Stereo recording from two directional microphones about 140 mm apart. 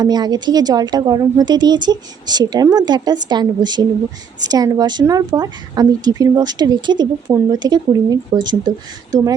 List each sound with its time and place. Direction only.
0.0 s a woman's voice: 30° right (ahead or behind)